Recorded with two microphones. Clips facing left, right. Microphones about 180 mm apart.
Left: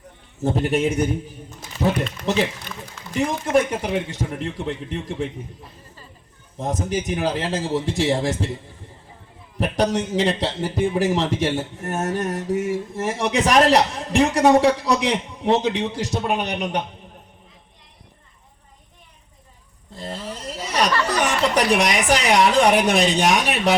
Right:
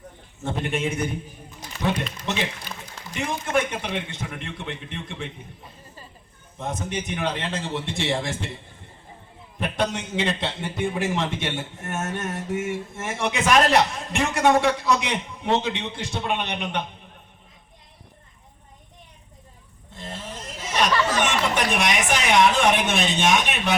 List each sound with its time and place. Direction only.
0.4 s a man's voice: 35° left (ahead or behind)
3.2 s a man's voice: 35° left (ahead or behind)
6.6 s a man's voice: 35° left (ahead or behind)
9.6 s a man's voice: 35° left (ahead or behind)
19.9 s a sound: 35° left (ahead or behind)
21.5 s a man's voice: 35° left (ahead or behind)